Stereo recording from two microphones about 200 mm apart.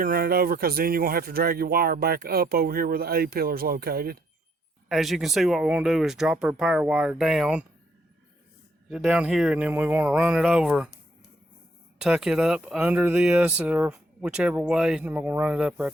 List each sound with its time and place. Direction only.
0.0 s speech: 50° right (ahead or behind)
4.9 s speech: centre (ahead or behind)
8.9 s speech: 5° right (ahead or behind)
11.9 s speech: 5° right (ahead or behind)